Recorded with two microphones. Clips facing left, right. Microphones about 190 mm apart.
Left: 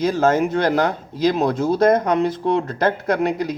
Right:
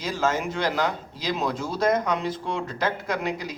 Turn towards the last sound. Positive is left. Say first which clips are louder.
# left 8 dB
turn(degrees=55)  # may be behind; listen again after turning